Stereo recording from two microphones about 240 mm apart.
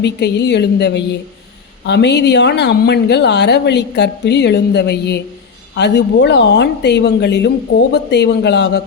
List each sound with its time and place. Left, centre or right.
0.0 s speech: left